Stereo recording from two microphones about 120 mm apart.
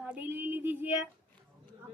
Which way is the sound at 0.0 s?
15° right (ahead or behind).